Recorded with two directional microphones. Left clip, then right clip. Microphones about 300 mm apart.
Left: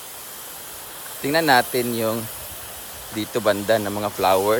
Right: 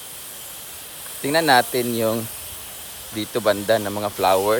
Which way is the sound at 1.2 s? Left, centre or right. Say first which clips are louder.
Right 1 dB; centre.